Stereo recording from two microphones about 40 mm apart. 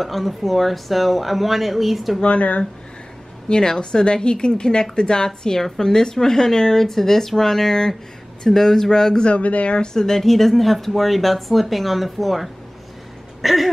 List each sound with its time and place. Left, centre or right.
0.0 s speech: centre
2.2 s speech: left
3.4 s a woman's voice: centre
9.4 s speech: left
9.8 s speech: centre
13.4 s a sound: centre